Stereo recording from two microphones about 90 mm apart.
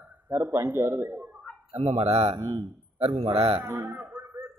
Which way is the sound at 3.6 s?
30° right (ahead or behind).